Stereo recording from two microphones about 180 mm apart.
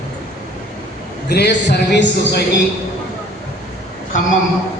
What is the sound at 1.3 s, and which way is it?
A man's voice, 65° left (ahead or behind).